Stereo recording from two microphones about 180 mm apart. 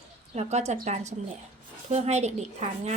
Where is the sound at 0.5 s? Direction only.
40° right (ahead or behind).